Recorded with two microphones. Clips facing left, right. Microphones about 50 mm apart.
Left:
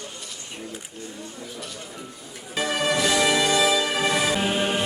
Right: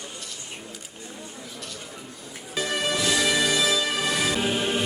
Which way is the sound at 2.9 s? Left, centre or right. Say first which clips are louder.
Left 3 dB; left.